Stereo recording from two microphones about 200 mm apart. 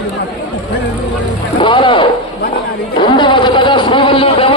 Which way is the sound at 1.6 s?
25° left (ahead or behind).